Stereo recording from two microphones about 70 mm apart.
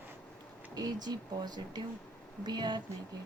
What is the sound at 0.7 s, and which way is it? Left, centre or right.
A woman's voice, right.